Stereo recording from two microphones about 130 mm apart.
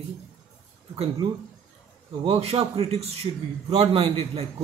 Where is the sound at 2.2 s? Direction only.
50° right (ahead or behind).